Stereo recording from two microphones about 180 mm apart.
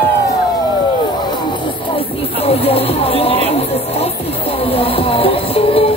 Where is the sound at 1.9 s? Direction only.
35° left (ahead or behind).